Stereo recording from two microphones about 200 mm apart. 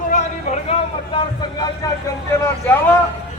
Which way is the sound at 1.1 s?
20° left (ahead or behind).